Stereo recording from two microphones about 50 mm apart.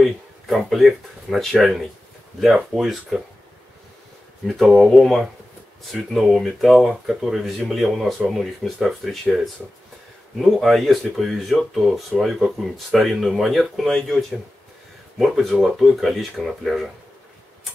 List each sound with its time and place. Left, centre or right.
0.0 s speech: centre
4.5 s speech: centre
15.1 s speech: centre